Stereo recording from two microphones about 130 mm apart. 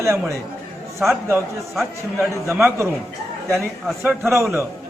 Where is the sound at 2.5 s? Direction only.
15° right (ahead or behind).